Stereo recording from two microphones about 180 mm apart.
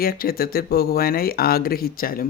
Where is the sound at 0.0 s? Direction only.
55° left (ahead or behind).